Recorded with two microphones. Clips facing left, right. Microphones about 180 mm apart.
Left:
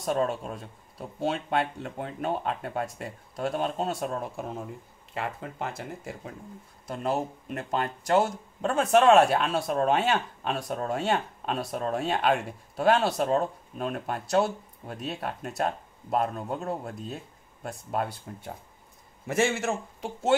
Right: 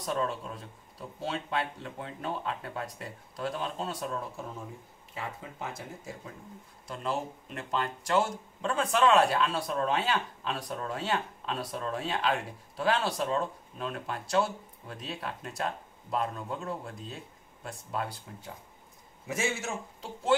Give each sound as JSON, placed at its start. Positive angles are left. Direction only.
{"t": 0.1, "sound": "speech", "side_deg": 50}
{"t": 5.1, "sound": "speech", "side_deg": 70}
{"t": 6.9, "sound": "speech", "side_deg": 50}
{"t": 17.6, "sound": "speech", "side_deg": 60}
{"t": 19.2, "sound": "speech", "side_deg": 70}